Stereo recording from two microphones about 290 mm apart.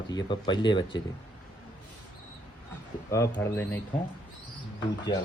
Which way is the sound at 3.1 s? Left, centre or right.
Centre.